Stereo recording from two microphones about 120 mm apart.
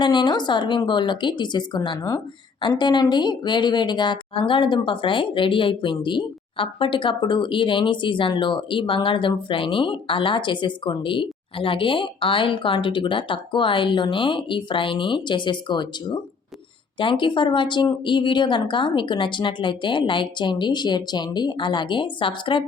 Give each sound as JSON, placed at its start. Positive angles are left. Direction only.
{"t": 0.0, "sound": "a woman's voice", "side_deg": 40}